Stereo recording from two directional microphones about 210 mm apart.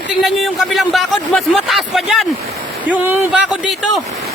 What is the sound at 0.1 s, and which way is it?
Speech, centre (ahead or behind).